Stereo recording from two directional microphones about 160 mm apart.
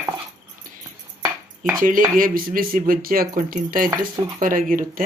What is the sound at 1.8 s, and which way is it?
Speech, 60° right (ahead or behind).